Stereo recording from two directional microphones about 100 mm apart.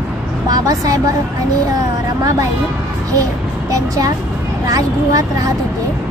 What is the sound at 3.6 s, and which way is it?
A woman's voice, 35° right (ahead or behind).